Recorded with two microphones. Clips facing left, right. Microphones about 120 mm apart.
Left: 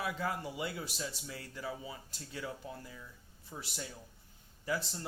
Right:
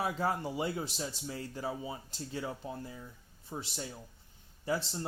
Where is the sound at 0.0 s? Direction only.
30° right (ahead or behind).